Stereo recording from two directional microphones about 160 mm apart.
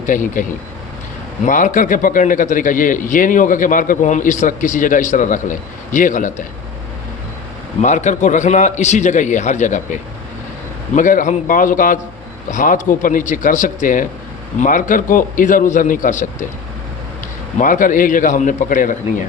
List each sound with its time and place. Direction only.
0.0 s a man's voice: 55° left (ahead or behind)
1.5 s a man's voice: 55° left (ahead or behind)
7.8 s a man's voice: 50° left (ahead or behind)
17.6 s a man's voice: 55° left (ahead or behind)